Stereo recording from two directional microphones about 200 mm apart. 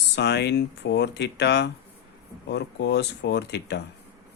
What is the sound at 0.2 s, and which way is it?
Speech, 60° left (ahead or behind).